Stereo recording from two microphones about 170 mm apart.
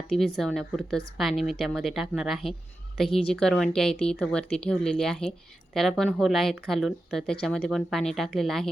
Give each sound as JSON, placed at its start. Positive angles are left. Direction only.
{"t": 0.1, "sound": "speech", "side_deg": 0}